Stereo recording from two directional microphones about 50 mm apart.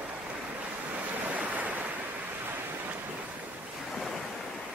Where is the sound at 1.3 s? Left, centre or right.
Right.